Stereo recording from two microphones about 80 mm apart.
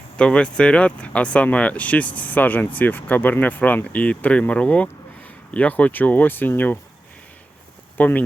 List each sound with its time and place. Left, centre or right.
0.2 s speech: centre
7.9 s speech: left